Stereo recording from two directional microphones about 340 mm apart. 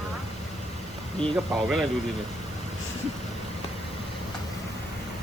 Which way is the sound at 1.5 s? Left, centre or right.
Centre.